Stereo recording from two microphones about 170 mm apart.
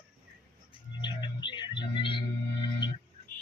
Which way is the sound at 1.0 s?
25° left (ahead or behind).